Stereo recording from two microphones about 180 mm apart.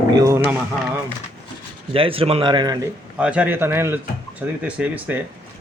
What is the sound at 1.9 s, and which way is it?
Speech, 30° right (ahead or behind).